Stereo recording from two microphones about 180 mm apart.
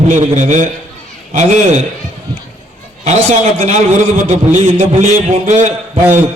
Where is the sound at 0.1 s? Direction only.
40° right (ahead or behind).